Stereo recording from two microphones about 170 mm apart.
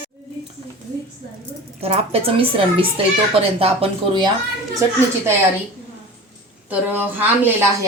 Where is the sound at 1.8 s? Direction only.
35° right (ahead or behind).